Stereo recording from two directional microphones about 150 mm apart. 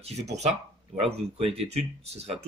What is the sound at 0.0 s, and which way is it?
Speech, 45° right (ahead or behind).